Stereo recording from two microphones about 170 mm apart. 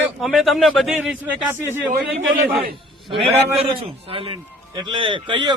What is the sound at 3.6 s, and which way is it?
A man's voice, 30° right (ahead or behind).